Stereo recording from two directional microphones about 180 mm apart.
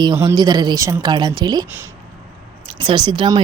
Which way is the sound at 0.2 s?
20° right (ahead or behind).